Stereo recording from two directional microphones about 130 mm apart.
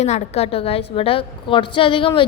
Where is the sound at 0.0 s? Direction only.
55° left (ahead or behind).